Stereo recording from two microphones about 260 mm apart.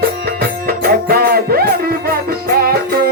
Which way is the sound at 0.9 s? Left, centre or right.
Right.